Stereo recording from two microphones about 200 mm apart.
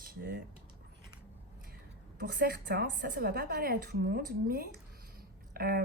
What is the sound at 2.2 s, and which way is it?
A woman's voice, 50° right (ahead or behind).